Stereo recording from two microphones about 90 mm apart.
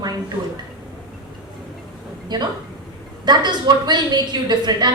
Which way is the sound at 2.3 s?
50° right (ahead or behind).